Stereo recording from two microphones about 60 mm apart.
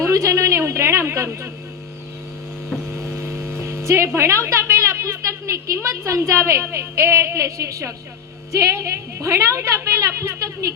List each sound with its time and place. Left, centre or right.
0.0 s a sound: right
2.9 s vehicle: right
3.6 s a woman's voice: right